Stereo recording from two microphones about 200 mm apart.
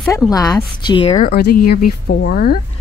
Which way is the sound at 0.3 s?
20° left (ahead or behind).